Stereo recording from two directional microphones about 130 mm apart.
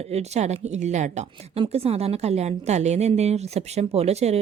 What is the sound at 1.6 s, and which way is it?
Speech, 50° right (ahead or behind).